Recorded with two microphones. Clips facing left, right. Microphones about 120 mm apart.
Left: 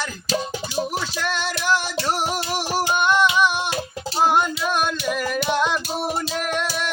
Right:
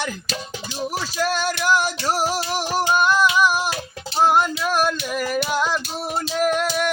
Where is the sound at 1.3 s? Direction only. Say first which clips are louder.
Right 3 dB; 40° right (ahead or behind).